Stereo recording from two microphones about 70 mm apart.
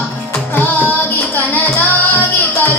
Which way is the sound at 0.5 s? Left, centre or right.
Left.